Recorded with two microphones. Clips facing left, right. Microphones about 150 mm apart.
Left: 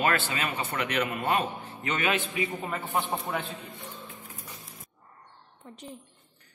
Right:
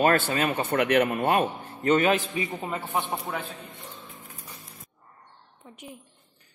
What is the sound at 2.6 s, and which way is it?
Speech, 15° right (ahead or behind).